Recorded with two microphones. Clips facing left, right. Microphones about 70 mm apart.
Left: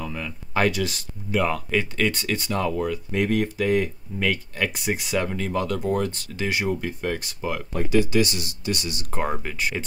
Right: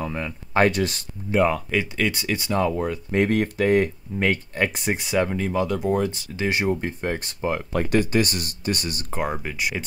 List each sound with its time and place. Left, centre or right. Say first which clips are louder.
0.0 s speech: right 3 dB; right
1.5 s speech: right 1 dB; centre
3.1 s speech: right 4 dB; right
5.0 s speech: right 5 dB; centre; by 7.5 s right
7.9 s speech: left 1 dB; right
9.2 s speech: even; centre